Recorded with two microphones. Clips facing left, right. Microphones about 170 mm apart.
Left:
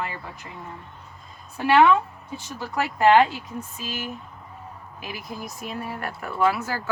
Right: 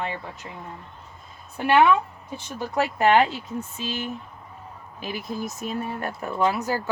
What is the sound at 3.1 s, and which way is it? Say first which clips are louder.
Speech: left 4 dB; 25° right (ahead or behind).